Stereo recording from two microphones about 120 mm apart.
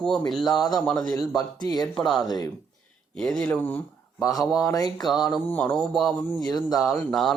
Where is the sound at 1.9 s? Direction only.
Centre (ahead or behind).